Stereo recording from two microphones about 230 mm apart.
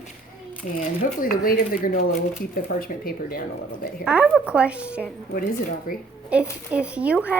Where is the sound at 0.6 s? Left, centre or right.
Left.